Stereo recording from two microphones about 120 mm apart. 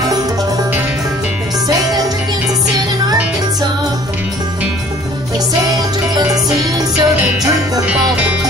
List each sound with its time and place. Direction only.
1.7 s music: 30° right (ahead or behind)
5.7 s music: 30° right (ahead or behind)